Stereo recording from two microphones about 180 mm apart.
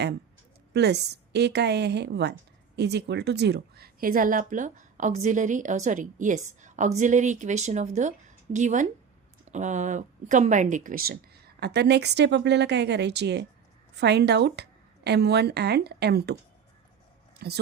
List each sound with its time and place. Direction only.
0.7 s a woman's voice: 65° right (ahead or behind)
17.4 s a woman's voice: 60° right (ahead or behind)